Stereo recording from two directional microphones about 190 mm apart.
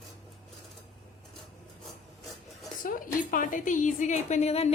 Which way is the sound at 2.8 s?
45° left (ahead or behind).